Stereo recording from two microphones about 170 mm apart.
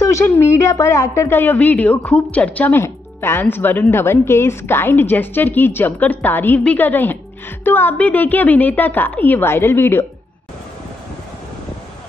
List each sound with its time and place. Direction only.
0.0 s speech: 15° left (ahead or behind)